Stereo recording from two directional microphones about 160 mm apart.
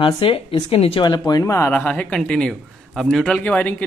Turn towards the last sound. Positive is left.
turn(degrees=10)  # may be behind; listen again after turning